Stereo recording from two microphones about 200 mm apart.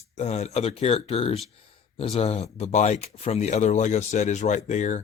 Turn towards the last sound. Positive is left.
turn(degrees=35)  # may be behind; listen again after turning